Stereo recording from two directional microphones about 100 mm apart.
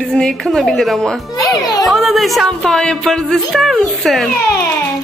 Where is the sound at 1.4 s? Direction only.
40° left (ahead or behind).